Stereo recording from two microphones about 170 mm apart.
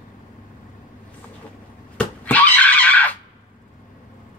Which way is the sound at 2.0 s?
10° left (ahead or behind).